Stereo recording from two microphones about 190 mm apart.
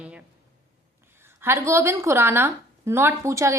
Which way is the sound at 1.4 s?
15° right (ahead or behind).